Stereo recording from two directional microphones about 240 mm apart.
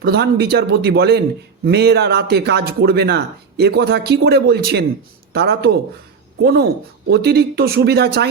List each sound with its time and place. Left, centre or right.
0.0 s speech: right